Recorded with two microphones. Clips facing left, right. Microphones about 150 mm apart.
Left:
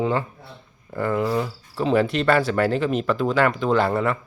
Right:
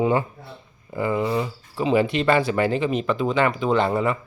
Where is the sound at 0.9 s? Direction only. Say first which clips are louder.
Even; 5° right (ahead or behind).